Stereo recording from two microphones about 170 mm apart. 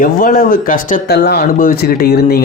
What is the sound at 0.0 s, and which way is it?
Speech, 55° left (ahead or behind).